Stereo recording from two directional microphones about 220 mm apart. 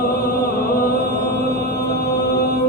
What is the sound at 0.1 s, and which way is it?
Music, 40° left (ahead or behind).